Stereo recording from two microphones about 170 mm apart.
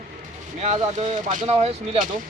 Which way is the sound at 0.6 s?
40° right (ahead or behind).